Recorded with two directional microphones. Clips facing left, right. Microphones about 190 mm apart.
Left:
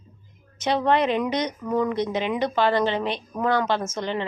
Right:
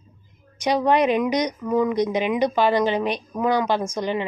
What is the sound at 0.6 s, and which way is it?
Speech, 15° right (ahead or behind).